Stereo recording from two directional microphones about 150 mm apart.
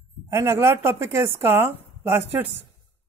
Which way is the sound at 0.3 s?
15° right (ahead or behind).